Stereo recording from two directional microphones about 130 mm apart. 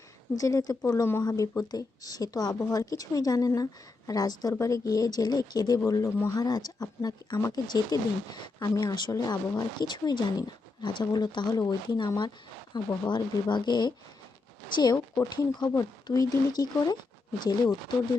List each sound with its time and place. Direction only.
0.3 s speech: 25° left (ahead or behind)
1.2 s speech: 30° left (ahead or behind)